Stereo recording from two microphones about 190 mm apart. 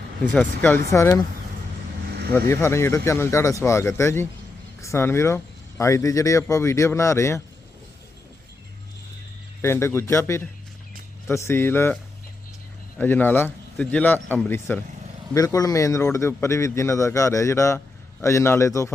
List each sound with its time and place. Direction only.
0.3 s speech: 10° left (ahead or behind)
2.5 s speech: 15° left (ahead or behind)
9.6 s speech: 15° left (ahead or behind)
13.0 s speech: 10° left (ahead or behind)